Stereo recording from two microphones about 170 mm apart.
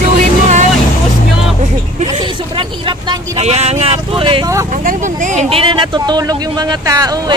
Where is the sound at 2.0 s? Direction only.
30° right (ahead or behind).